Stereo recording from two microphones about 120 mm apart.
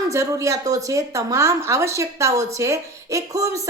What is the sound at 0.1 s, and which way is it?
Speech, 25° right (ahead or behind).